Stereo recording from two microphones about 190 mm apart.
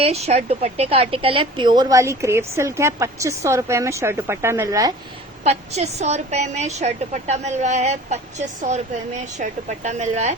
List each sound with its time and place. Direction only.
0.0 s speech: 35° right (ahead or behind); by 4.9 s 20° right (ahead or behind)
5.4 s a woman's voice: 35° right (ahead or behind)